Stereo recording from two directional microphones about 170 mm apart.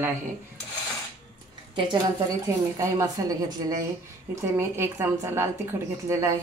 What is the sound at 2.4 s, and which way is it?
Speech, 20° right (ahead or behind).